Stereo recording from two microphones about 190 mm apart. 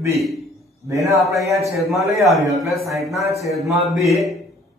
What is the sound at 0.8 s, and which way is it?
Speech, 15° right (ahead or behind).